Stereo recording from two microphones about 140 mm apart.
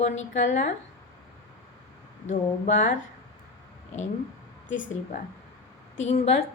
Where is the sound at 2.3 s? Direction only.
65° left (ahead or behind).